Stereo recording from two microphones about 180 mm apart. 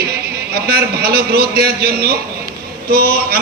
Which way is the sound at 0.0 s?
60° right (ahead or behind).